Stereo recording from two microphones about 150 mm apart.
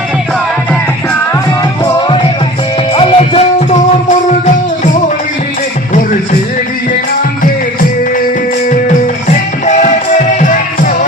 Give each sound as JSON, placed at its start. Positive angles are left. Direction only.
{"t": 1.8, "sound": "music", "side_deg": 30}
{"t": 4.1, "sound": "music", "side_deg": 55}
{"t": 9.6, "sound": "music", "side_deg": 50}